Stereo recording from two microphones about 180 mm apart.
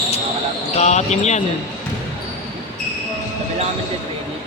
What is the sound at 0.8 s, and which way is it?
Speech, 40° left (ahead or behind).